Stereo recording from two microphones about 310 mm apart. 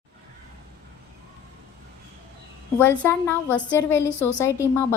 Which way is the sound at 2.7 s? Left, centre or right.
Centre.